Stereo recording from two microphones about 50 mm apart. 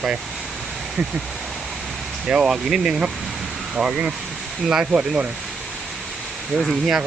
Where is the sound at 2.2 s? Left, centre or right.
Centre.